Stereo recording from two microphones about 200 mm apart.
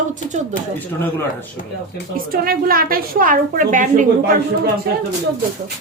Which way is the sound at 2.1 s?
45° right (ahead or behind).